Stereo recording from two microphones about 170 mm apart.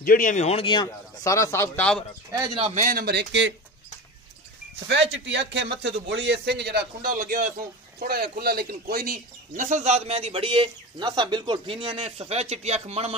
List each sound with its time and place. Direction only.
0.0 s a man's voice: 55° left (ahead or behind); by 2.0 s 5° left (ahead or behind)
2.3 s speech: 20° right (ahead or behind)
2.6 s speech: 50° right (ahead or behind); by 3.5 s 90° right
5.1 s a man's voice: 90° right; by 7.5 s 50° right (ahead or behind)
8.0 s speech: 60° right (ahead or behind); by 13.1 s 40° right (ahead or behind)